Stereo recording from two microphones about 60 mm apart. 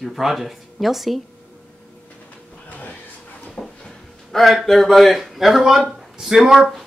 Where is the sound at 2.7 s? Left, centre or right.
Left.